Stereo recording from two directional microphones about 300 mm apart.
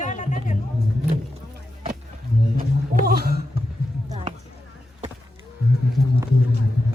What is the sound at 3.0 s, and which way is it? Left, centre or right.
Speech, right.